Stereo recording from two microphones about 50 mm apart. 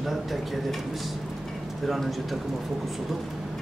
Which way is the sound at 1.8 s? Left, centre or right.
Centre.